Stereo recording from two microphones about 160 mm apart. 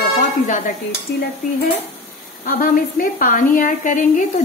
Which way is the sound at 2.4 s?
60° left (ahead or behind).